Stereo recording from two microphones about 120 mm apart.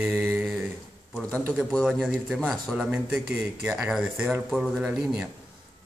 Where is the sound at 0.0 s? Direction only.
20° right (ahead or behind).